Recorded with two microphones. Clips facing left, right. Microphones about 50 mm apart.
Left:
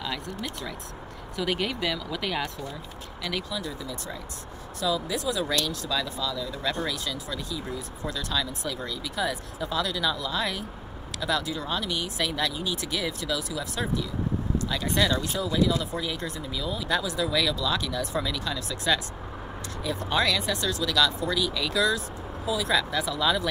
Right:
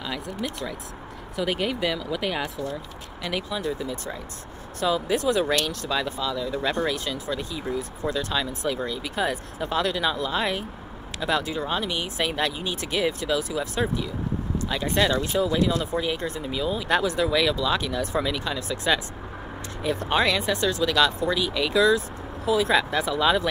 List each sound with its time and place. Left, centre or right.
0.0 s speech: centre
3.5 s speech: right
5.9 s speech: right
16.8 s speech: right
17.4 s speech: right
19.8 s speech: right